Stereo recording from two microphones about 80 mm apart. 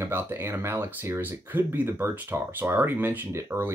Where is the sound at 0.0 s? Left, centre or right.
Right.